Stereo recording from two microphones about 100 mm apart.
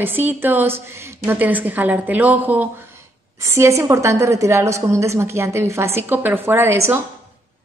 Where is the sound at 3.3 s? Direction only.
30° right (ahead or behind).